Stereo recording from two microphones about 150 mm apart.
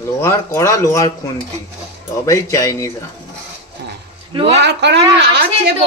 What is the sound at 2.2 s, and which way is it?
Speech, 20° left (ahead or behind).